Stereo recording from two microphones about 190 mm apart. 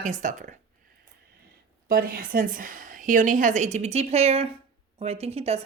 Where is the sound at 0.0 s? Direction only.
40° right (ahead or behind).